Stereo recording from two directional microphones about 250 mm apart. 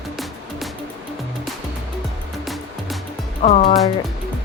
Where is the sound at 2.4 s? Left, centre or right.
Centre.